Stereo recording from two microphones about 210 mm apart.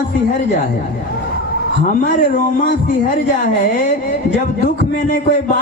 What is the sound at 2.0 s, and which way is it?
Speech, 40° left (ahead or behind).